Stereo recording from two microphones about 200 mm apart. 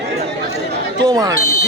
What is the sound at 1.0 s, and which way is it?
Speech, 20° right (ahead or behind).